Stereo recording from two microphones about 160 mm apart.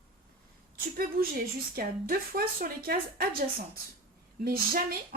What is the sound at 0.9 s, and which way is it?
A woman's voice, 70° right (ahead or behind).